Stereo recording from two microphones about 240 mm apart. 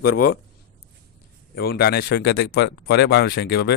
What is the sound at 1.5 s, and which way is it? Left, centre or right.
Speech, left.